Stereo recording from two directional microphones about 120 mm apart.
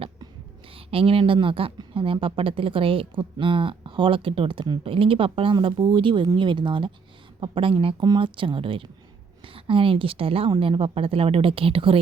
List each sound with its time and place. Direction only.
0.9 s speech: 50° right (ahead or behind)